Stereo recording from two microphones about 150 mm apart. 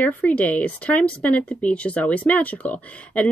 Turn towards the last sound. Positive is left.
turn(degrees=10)  # may be behind; listen again after turning